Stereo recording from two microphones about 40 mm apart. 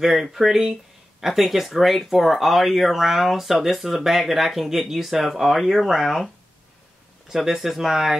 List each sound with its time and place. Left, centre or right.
0.0 s speech: centre